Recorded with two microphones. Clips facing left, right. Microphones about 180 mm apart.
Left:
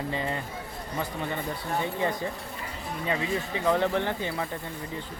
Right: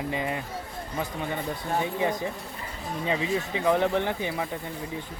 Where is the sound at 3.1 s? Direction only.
20° right (ahead or behind).